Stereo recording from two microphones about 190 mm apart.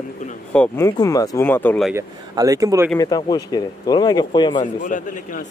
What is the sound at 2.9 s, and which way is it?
Speech, 20° left (ahead or behind).